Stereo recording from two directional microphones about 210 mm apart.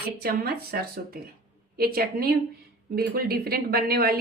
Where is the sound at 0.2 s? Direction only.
45° right (ahead or behind).